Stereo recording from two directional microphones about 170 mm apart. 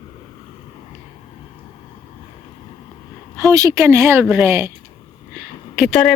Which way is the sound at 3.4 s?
20° right (ahead or behind).